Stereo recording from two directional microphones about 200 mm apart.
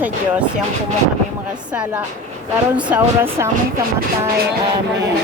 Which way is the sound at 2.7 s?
10° right (ahead or behind).